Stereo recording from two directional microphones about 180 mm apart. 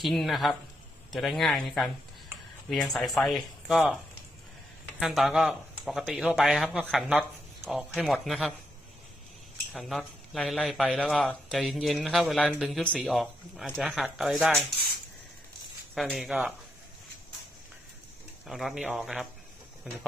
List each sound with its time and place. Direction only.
0.0 s speech: centre (ahead or behind)
9.7 s speech: centre (ahead or behind)
16.0 s speech: centre (ahead or behind)
18.4 s speech: centre (ahead or behind)